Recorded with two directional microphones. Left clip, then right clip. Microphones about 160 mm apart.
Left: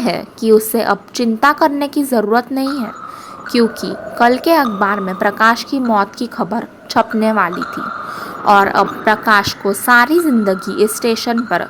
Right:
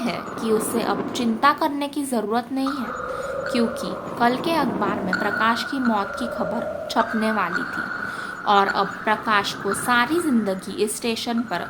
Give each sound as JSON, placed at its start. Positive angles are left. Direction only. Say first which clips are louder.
{"t": 0.0, "sound": "a woman's voice", "louder": "left 9 dB", "side_deg": 45}